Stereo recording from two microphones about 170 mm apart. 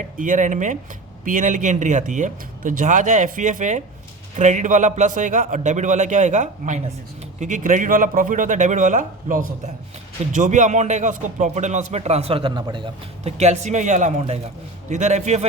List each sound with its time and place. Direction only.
0.2 s speech: 50° right (ahead or behind)